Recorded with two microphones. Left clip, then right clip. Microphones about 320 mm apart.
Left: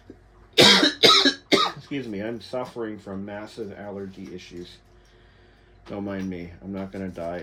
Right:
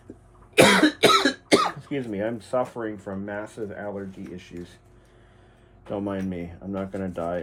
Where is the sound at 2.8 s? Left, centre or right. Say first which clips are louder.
Right 1 dB; centre.